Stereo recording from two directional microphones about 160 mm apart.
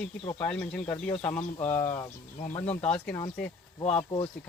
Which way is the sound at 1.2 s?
15° left (ahead or behind).